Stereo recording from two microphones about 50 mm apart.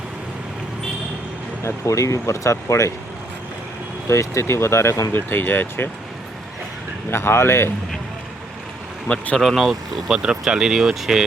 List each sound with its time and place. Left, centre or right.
1.6 s speech: left
4.1 s speech: left
5.3 s speech: left
7.1 s speech: left
9.4 s speech: centre
10.1 s speech: centre